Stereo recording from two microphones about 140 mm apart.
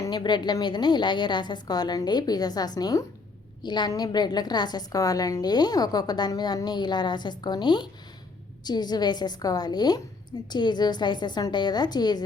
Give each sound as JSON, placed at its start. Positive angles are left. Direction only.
{"t": 0.0, "sound": "a woman's voice", "side_deg": 30}